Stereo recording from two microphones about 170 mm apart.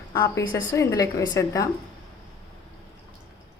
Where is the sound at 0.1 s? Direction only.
20° left (ahead or behind).